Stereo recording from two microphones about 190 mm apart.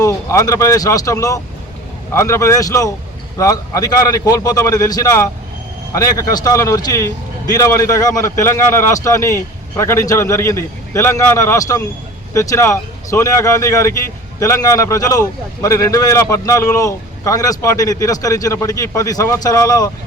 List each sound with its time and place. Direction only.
0.0 s speech: 15° left (ahead or behind)